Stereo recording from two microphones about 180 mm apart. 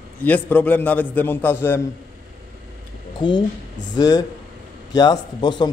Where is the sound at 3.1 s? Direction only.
25° left (ahead or behind).